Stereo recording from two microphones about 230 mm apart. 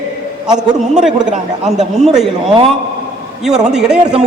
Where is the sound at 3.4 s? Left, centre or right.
Centre.